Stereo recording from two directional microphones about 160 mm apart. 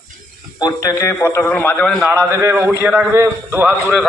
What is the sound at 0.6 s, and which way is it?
A man's voice, 20° left (ahead or behind).